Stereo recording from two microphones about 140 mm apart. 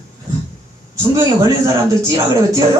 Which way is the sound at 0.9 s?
25° right (ahead or behind).